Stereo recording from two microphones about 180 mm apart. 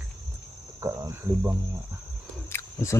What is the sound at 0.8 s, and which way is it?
Cricket, 15° right (ahead or behind).